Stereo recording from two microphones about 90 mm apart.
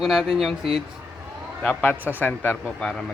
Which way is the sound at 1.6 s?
20° left (ahead or behind).